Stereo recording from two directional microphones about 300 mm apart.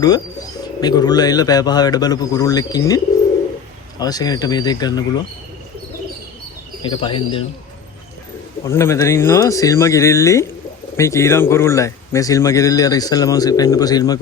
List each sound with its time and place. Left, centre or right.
0.8 s a man's voice: centre
6.8 s a man's voice: centre
8.6 s a man's voice: centre